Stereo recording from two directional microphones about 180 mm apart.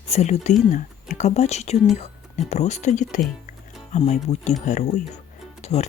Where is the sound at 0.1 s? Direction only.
40° left (ahead or behind).